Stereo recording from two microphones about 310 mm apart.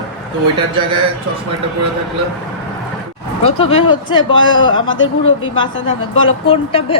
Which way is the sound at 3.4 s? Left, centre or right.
Centre.